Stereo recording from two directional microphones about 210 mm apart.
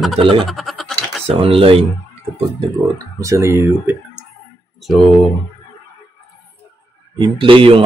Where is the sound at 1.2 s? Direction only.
25° right (ahead or behind).